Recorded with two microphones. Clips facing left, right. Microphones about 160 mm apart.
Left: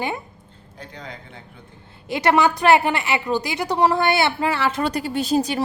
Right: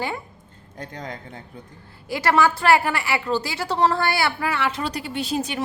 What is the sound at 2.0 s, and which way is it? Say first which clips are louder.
A woman's voice: left 2 dB; 20° left (ahead or behind).